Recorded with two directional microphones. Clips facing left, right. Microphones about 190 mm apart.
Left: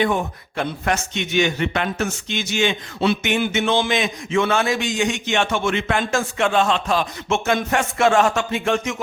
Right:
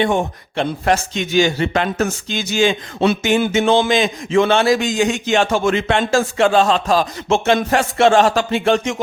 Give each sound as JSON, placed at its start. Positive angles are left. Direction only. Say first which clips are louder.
{"t": 0.0, "sound": "speech", "louder": "right 3 dB", "side_deg": -25}